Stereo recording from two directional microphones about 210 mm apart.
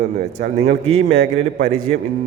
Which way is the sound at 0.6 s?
30° right (ahead or behind).